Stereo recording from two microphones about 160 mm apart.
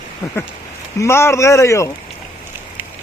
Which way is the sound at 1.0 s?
15° left (ahead or behind).